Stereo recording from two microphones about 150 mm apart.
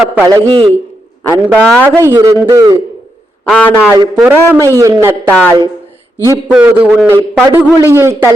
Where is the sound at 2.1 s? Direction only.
20° right (ahead or behind).